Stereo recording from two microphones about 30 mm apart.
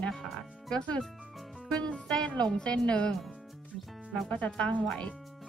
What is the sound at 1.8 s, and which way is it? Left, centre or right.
Speech, left.